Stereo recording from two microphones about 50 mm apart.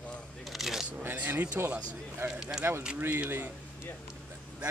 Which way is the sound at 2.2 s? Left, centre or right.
Right.